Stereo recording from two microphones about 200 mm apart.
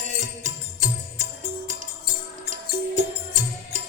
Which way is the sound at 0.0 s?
40° right (ahead or behind).